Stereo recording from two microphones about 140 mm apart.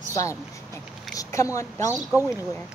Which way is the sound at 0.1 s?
25° left (ahead or behind).